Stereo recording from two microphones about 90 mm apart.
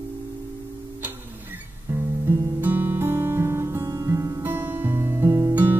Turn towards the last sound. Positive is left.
turn(degrees=-20)  # may be behind; listen again after turning